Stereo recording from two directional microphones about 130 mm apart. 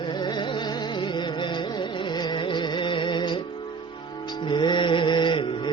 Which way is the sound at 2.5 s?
40° left (ahead or behind).